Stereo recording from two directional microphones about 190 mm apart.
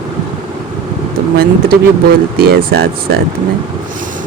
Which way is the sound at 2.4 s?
55° right (ahead or behind).